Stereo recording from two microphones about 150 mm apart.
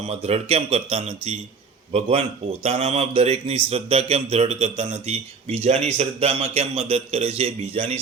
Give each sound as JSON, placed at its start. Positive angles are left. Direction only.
{"t": 0.1, "sound": "a man's voice", "side_deg": -45}